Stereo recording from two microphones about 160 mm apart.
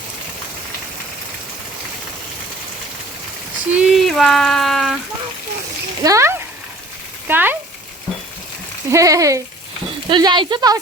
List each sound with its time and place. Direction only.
3.7 s a sound: 5° right (ahead or behind)
6.0 s speech: 20° right (ahead or behind)
8.9 s speech: 20° right (ahead or behind)